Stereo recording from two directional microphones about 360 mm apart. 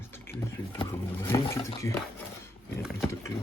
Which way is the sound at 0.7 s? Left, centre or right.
Centre.